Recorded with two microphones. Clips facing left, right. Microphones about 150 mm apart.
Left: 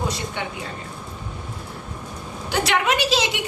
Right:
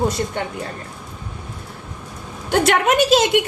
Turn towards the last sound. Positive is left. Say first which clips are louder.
# right 6 dB
turn(degrees=-50)  # may be behind; listen again after turning